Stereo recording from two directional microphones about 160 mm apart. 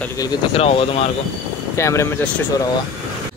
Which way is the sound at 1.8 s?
15° left (ahead or behind).